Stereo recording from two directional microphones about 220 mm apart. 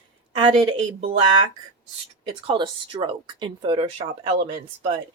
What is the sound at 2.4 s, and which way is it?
Speech, 20° right (ahead or behind).